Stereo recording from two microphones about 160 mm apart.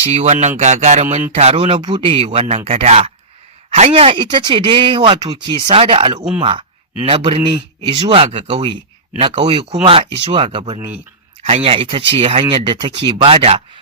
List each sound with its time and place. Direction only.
0.1 s speech: 45° right (ahead or behind)